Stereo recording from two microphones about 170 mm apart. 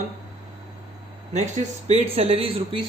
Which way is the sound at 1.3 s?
40° right (ahead or behind).